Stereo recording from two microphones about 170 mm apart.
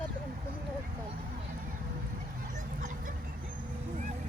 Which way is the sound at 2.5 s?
45° right (ahead or behind).